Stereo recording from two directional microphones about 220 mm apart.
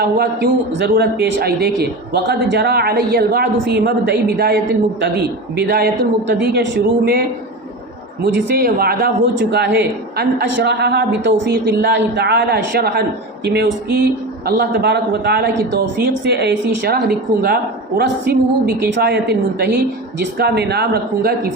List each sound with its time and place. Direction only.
0.0 s a woman's voice: 45° right (ahead or behind)
8.5 s a woman's voice: 45° right (ahead or behind)